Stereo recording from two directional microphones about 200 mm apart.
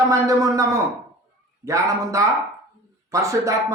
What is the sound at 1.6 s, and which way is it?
Speech, 15° right (ahead or behind).